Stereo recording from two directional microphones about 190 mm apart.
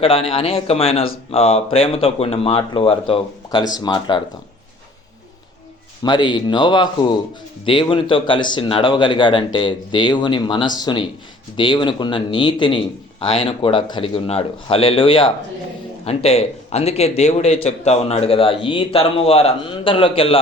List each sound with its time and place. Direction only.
0.0 s a man's voice: 30° left (ahead or behind)
6.0 s a man's voice: 25° left (ahead or behind)